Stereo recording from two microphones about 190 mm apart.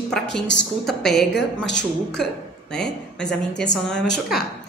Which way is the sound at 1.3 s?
65° left (ahead or behind).